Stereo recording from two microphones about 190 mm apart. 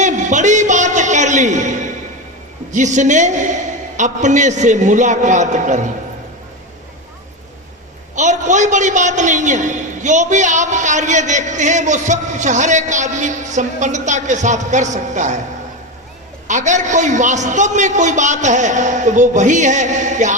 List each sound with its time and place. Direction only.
0.0 s a sound: 40° right (ahead or behind)
2.7 s a man's voice: 40° right (ahead or behind)
8.1 s a man's voice: 40° right (ahead or behind)
16.5 s a man's voice: 40° right (ahead or behind)